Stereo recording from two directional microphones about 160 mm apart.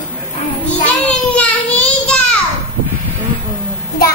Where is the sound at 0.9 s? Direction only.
10° left (ahead or behind).